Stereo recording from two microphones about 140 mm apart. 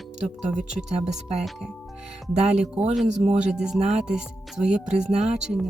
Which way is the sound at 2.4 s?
50° right (ahead or behind).